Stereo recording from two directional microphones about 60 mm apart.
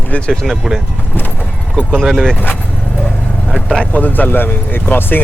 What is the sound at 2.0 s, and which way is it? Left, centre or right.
Speech, centre.